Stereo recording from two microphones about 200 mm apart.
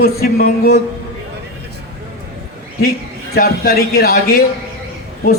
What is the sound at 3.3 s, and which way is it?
A man's voice, 50° left (ahead or behind).